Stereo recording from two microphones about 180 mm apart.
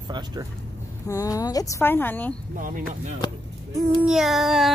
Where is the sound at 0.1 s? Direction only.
20° right (ahead or behind).